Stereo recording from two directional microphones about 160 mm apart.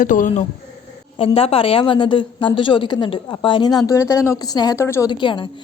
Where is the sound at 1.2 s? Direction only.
35° left (ahead or behind); by 5.1 s 15° left (ahead or behind).